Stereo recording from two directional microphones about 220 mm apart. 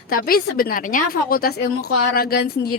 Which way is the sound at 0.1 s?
40° left (ahead or behind).